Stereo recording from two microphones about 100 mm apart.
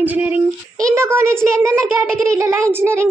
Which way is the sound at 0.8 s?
30° right (ahead or behind).